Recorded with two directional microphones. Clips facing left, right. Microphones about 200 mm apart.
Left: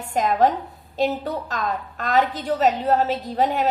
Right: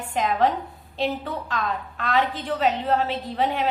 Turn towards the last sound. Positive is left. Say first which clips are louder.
# left 3 dB
turn(degrees=40)  # may be behind; listen again after turning